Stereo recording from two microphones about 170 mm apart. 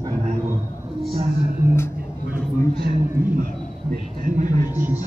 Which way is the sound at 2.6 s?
65° right (ahead or behind).